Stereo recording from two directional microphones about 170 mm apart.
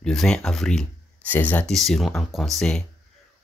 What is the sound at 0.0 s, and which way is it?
Speech, 5° left (ahead or behind).